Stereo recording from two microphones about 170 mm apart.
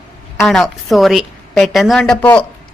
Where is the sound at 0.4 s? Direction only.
Centre (ahead or behind).